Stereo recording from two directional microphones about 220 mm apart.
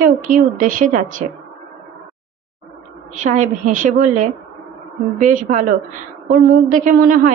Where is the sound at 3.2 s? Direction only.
35° right (ahead or behind).